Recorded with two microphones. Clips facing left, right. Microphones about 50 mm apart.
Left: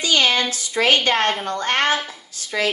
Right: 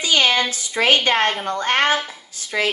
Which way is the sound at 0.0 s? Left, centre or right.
Centre.